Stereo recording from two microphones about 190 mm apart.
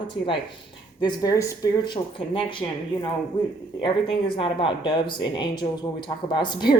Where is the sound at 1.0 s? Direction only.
20° left (ahead or behind).